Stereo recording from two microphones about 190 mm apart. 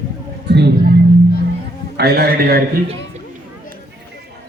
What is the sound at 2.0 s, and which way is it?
Speech, 55° right (ahead or behind).